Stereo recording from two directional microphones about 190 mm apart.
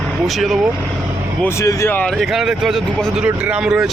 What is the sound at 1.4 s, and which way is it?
Speech, 15° left (ahead or behind).